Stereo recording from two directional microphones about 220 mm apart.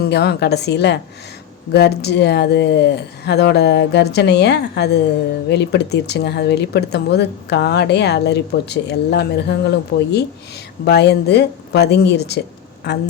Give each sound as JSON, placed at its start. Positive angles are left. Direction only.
{"t": 0.0, "sound": "speech", "side_deg": 45}